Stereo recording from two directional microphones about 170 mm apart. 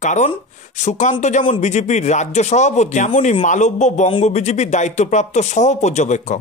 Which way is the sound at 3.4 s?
45° left (ahead or behind).